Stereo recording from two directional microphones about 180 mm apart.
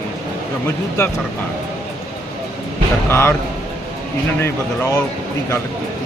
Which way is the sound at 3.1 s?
15° left (ahead or behind).